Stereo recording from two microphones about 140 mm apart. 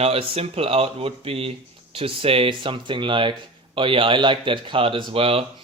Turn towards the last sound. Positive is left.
turn(degrees=-40)  # may be behind; listen again after turning